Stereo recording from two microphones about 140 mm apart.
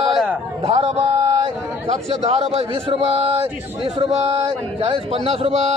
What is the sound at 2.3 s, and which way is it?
A man's voice, 45° right (ahead or behind).